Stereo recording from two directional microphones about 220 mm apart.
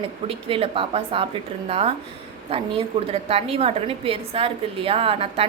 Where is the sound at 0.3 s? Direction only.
25° right (ahead or behind).